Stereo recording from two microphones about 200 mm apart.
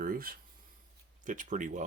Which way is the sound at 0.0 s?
45° right (ahead or behind).